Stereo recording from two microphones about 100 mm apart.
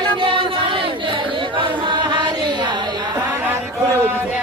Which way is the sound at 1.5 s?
50° right (ahead or behind).